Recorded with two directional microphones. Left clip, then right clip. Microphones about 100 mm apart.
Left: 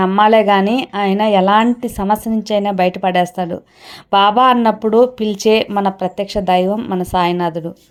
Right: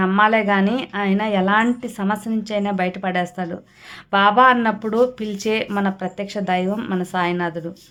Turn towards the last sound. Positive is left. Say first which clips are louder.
# left 6 dB
turn(degrees=45)  # may be behind; listen again after turning